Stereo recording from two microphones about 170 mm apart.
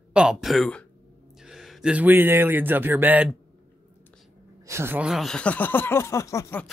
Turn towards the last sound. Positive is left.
turn(degrees=15)  # may be behind; listen again after turning